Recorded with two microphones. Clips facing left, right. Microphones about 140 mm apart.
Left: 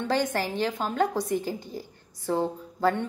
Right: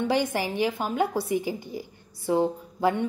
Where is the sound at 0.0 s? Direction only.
10° right (ahead or behind).